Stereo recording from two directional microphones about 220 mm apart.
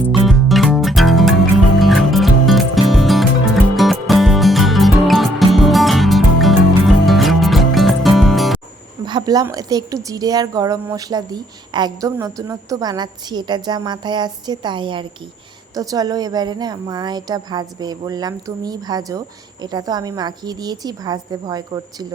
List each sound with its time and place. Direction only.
0.3 s music: centre (ahead or behind)
9.0 s speech: 20° right (ahead or behind)